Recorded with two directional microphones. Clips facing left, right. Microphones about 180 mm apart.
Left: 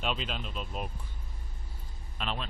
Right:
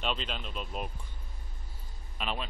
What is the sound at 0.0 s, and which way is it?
Speech, 5° left (ahead or behind).